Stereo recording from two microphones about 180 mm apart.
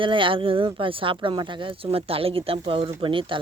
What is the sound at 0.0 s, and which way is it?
Speech, 30° right (ahead or behind).